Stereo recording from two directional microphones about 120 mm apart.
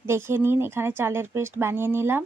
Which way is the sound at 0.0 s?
20° right (ahead or behind).